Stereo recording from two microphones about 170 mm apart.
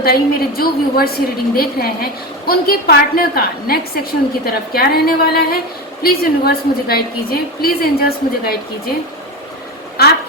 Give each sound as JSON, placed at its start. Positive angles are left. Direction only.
{"t": 0.0, "sound": "a woman's voice", "side_deg": 60}
{"t": 10.0, "sound": "speech", "side_deg": 65}